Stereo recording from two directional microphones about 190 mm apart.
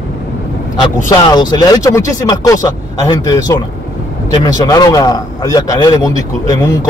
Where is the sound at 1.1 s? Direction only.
20° left (ahead or behind).